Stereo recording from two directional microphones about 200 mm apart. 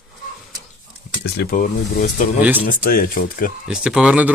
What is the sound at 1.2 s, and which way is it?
Speech, 50° left (ahead or behind).